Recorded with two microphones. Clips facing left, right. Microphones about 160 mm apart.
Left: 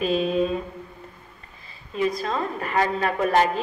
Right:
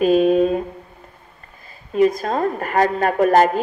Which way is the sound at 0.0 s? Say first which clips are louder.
Right 8 dB; 50° right (ahead or behind).